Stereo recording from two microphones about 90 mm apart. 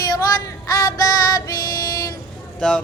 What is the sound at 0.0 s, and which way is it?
Music, 45° left (ahead or behind).